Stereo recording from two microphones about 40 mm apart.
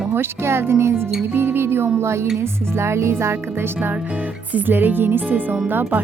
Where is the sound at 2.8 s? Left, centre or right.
Right.